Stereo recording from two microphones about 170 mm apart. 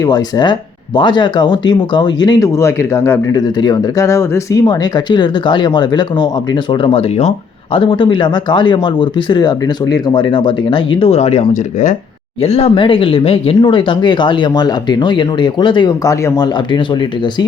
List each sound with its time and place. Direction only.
0.0 s speech: 25° left (ahead or behind)